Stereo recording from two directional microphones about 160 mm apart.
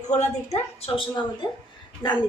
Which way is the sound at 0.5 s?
40° left (ahead or behind).